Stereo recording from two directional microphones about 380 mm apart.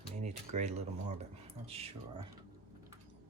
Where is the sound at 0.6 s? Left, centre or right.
Centre.